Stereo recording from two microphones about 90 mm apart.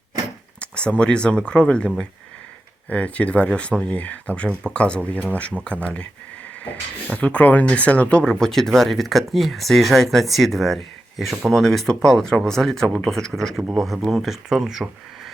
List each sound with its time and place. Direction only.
0.6 s speech: 10° left (ahead or behind)
2.9 s speech: 15° left (ahead or behind)
7.1 s speech: 15° left (ahead or behind)
8.2 s speech: 5° left (ahead or behind)